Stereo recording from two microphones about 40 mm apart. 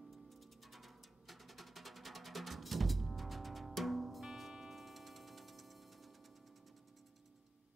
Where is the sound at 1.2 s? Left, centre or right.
Centre.